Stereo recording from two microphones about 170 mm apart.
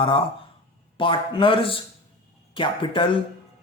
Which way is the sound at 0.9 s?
30° left (ahead or behind).